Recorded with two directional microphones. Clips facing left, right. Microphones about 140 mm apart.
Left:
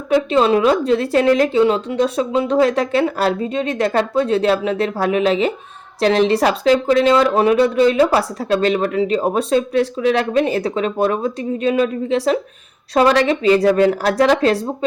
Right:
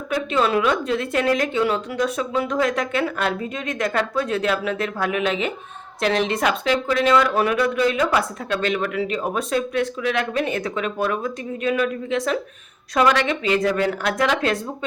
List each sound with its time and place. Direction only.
0.1 s speech: 30° left (ahead or behind)